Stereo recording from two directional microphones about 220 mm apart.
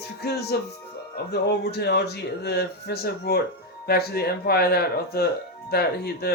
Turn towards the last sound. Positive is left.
turn(degrees=45)  # may be behind; listen again after turning